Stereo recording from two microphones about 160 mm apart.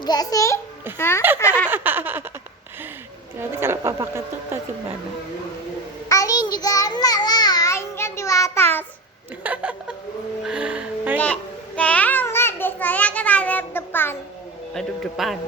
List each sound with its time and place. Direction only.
0.0 s a child's voice: 25° left (ahead or behind)
1.6 s a woman's voice: 10° right (ahead or behind)
3.5 s a woman's voice: 15° right (ahead or behind)
6.1 s child singing: 20° left (ahead or behind)
9.4 s a woman's voice: 10° right (ahead or behind)
11.8 s a sound: 10° left (ahead or behind)
14.7 s speech: centre (ahead or behind)